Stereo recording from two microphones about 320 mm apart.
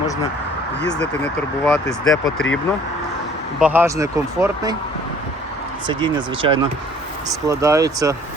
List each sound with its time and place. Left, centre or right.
0.9 s speech: centre
3.6 s speech: centre
5.9 s speech: centre